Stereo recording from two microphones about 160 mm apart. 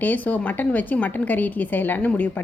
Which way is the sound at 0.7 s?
10° left (ahead or behind).